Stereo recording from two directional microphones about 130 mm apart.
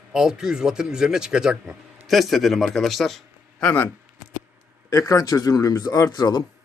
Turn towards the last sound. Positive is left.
turn(degrees=30)  # may be behind; listen again after turning